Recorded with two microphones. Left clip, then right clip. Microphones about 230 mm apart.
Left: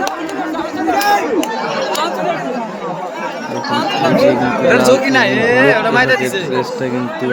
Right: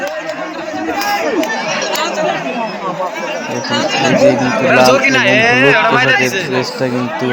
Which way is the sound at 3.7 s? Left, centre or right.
Left.